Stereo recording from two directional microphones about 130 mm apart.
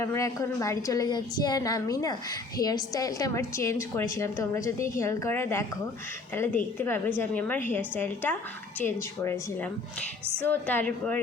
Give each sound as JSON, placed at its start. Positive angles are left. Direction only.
{"t": 0.0, "sound": "a woman's voice", "side_deg": 20}